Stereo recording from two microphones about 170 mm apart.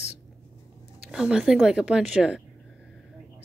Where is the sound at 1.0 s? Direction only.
5° right (ahead or behind).